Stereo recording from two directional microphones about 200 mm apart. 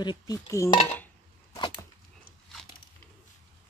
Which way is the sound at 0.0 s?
20° left (ahead or behind).